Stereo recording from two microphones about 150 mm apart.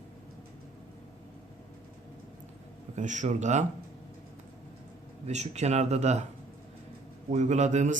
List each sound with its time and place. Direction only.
2.9 s speech: 55° right (ahead or behind)
5.2 s speech: 50° right (ahead or behind)
7.3 s speech: 50° right (ahead or behind)